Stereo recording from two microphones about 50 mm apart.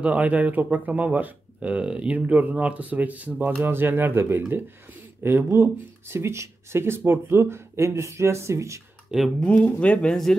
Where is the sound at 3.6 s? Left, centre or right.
Right.